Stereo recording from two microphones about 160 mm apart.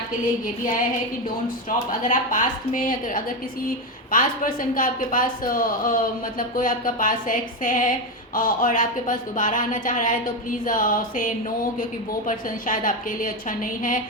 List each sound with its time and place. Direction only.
2.0 s speech: 55° left (ahead or behind)
12.6 s speech: 55° left (ahead or behind)